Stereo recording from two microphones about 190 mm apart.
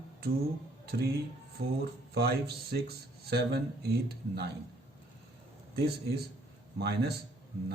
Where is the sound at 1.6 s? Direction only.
80° right.